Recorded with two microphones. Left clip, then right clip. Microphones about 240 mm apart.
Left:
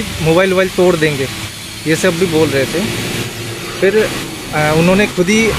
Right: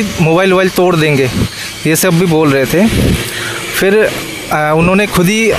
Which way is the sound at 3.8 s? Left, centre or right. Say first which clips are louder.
Right 2 dB; right.